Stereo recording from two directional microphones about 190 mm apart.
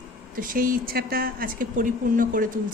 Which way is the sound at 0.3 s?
45° right (ahead or behind).